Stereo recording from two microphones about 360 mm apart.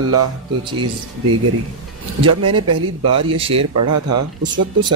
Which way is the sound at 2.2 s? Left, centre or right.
Right.